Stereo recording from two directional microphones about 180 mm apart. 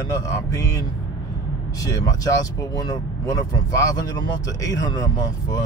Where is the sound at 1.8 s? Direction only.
20° left (ahead or behind).